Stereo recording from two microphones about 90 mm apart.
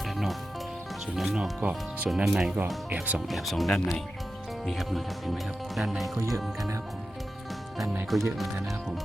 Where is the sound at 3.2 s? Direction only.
Centre (ahead or behind).